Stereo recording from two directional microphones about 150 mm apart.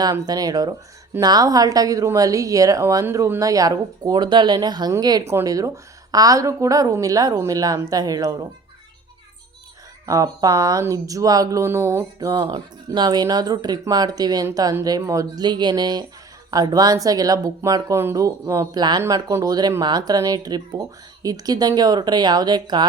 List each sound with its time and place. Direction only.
0.0 s speech: 25° right (ahead or behind)
10.1 s speech: 25° right (ahead or behind)